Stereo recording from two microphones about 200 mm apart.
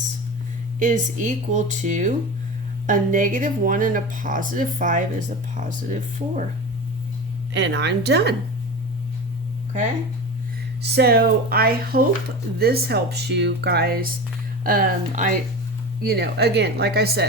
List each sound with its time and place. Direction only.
0.8 s speech: 40° right (ahead or behind)
7.5 s a woman's voice: 60° right (ahead or behind)
10.8 s speech: 55° right (ahead or behind)
16.0 s speech: 55° right (ahead or behind)